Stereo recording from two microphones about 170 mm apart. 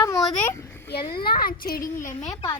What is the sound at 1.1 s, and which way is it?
Speech, 65° left (ahead or behind).